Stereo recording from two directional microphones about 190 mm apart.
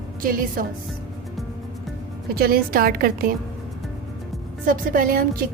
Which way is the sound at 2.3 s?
50° right (ahead or behind).